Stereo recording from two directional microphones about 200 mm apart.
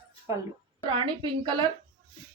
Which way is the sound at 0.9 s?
25° right (ahead or behind).